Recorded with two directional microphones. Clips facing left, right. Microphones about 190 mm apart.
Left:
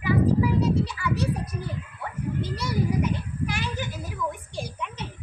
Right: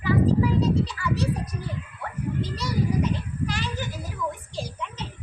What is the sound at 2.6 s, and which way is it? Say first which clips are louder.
Children playing: even; 10° left (ahead or behind).